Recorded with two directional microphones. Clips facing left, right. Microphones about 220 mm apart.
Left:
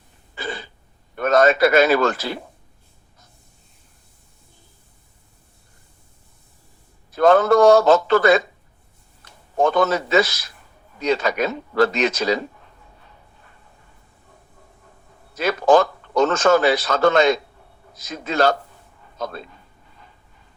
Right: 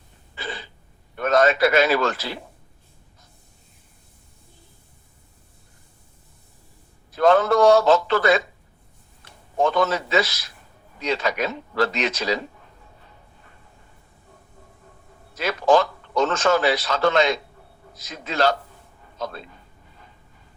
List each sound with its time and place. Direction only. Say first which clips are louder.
0.3 s a sound: left 4 dB; 45° left (ahead or behind)
1.1 s a man's voice: left 3 dB; 45° left (ahead or behind)
7.2 s a man's voice: left 3 dB; 45° left (ahead or behind)
9.6 s a man's voice: left 3 dB; 45° left (ahead or behind)
15.4 s a man's voice: left 3 dB; 45° left (ahead or behind)